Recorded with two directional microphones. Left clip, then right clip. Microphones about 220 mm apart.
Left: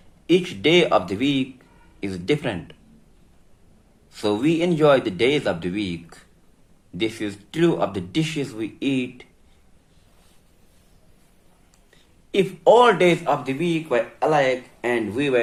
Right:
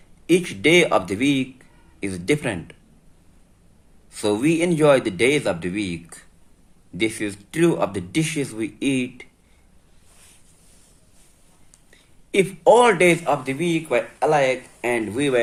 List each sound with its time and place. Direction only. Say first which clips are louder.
0.3 s speech: right 1 dB; 40° right (ahead or behind)
4.1 s speech: right 1 dB; 40° right (ahead or behind)
12.3 s speech: right 1 dB; 45° right (ahead or behind)